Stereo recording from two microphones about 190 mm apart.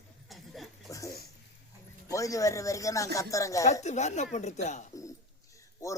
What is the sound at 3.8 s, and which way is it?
Speech, 35° left (ahead or behind).